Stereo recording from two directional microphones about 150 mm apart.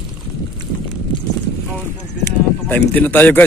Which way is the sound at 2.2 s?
10° left (ahead or behind).